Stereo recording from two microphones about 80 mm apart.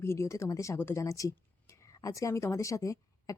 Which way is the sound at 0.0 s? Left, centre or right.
Left.